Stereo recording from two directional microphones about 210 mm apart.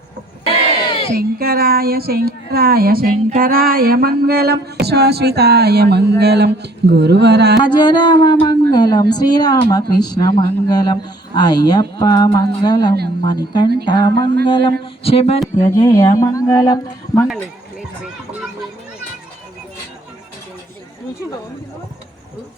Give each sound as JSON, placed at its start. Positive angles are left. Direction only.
{"t": 1.1, "sound": "music", "side_deg": -45}
{"t": 7.6, "sound": "speech", "side_deg": 20}
{"t": 15.7, "sound": "speech", "side_deg": 15}
{"t": 17.2, "sound": "a sound", "side_deg": -5}